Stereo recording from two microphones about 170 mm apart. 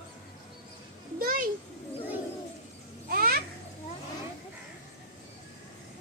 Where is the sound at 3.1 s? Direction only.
60° right (ahead or behind).